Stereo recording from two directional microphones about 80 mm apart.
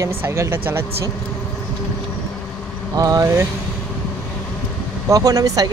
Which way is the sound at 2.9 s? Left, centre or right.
Right.